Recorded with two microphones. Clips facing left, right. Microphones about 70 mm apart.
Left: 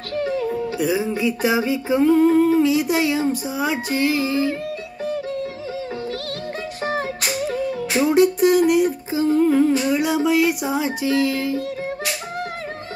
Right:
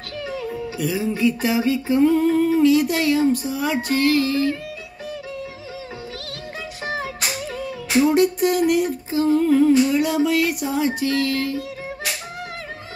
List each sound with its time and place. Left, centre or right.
0.2 s music: left
0.7 s speech: centre
8.1 s a sound: centre